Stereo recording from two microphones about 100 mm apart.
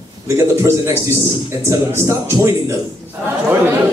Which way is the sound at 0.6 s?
30° right (ahead or behind).